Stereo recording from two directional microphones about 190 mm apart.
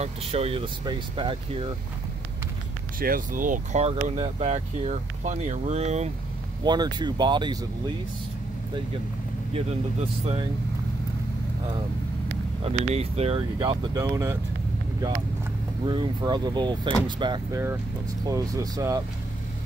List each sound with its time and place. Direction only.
0.0 s speech: 30° right (ahead or behind)
3.0 s speech: 45° right (ahead or behind)
6.6 s speech: 25° right (ahead or behind)
9.5 s speech: 30° right (ahead or behind)
12.6 s speech: 30° right (ahead or behind); by 14.4 s 15° right (ahead or behind)
15.8 s speech: 25° right (ahead or behind)